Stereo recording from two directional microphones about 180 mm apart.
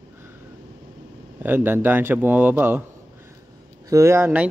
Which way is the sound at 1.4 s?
10° right (ahead or behind).